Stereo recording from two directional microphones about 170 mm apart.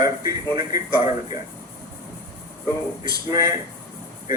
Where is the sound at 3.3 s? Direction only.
20° right (ahead or behind).